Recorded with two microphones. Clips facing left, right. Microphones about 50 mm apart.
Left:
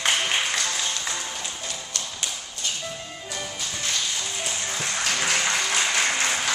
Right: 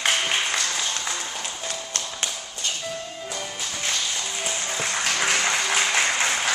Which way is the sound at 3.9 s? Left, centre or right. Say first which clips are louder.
Even; centre.